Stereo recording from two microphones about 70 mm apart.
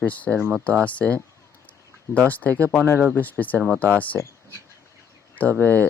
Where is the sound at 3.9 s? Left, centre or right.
Left.